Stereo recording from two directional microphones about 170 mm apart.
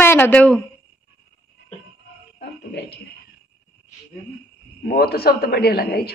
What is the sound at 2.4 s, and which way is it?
Speech, 85° left.